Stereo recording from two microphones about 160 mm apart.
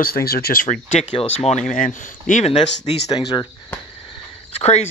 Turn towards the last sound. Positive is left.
turn(degrees=40)  # may be behind; listen again after turning